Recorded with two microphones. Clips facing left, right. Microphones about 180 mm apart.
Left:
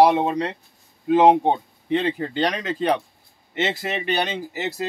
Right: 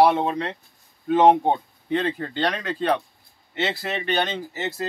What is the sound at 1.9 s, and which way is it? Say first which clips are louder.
Speech: left 2 dB; 15° left (ahead or behind).